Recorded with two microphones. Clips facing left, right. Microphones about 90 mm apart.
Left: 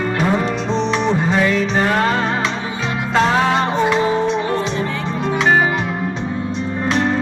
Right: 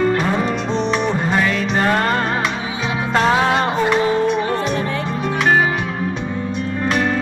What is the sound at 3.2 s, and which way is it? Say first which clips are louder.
Music: right 2 dB; 5° right (ahead or behind).